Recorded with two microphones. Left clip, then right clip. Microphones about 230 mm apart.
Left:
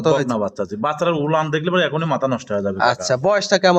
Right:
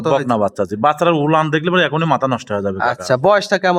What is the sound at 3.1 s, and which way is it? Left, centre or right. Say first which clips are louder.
Speech: right 4 dB; right.